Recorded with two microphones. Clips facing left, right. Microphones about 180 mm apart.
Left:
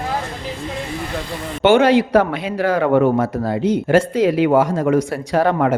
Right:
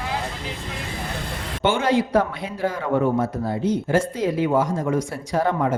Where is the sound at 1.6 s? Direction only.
70° left (ahead or behind).